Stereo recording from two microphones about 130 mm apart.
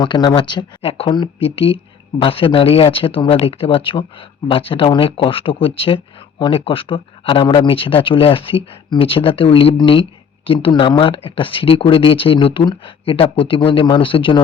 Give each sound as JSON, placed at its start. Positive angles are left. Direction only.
{"t": 0.0, "sound": "speech", "side_deg": 30}